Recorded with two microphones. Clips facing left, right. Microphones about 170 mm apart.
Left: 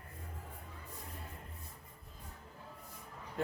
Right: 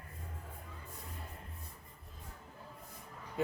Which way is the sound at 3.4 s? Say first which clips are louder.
Right 3 dB; 5° right (ahead or behind).